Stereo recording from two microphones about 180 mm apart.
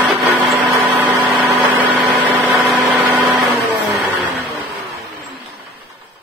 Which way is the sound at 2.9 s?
15° right (ahead or behind).